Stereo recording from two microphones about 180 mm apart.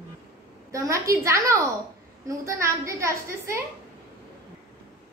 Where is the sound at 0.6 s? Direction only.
20° right (ahead or behind).